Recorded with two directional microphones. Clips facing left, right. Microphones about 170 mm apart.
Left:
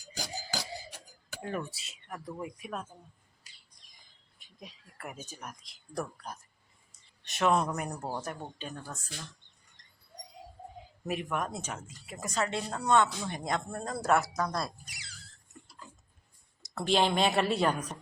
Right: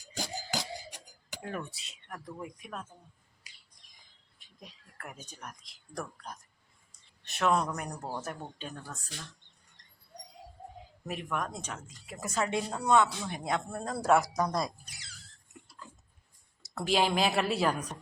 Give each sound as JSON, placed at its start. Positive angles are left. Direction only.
{"t": 0.1, "sound": "music", "side_deg": -20}
{"t": 1.4, "sound": "speech", "side_deg": 0}
{"t": 4.4, "sound": "a sound", "side_deg": 5}
{"t": 5.2, "sound": "speech", "side_deg": 5}
{"t": 11.0, "sound": "speech", "side_deg": 5}
{"t": 16.6, "sound": "speech", "side_deg": -5}